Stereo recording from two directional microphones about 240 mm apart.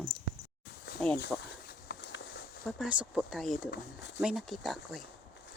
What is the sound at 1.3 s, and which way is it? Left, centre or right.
Speech, centre.